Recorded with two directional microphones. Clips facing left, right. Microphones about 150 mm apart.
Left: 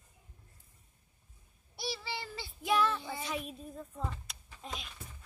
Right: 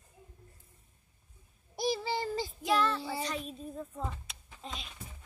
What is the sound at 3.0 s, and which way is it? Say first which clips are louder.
Speech: right 5 dB; 30° right (ahead or behind).